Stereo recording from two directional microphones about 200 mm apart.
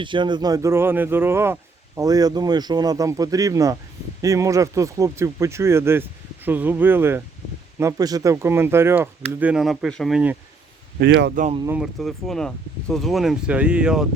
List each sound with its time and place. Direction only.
0.0 s speech: 25° right (ahead or behind); by 10.3 s 5° right (ahead or behind)
11.0 s speech: 55° right (ahead or behind)
11.7 s speech: centre (ahead or behind)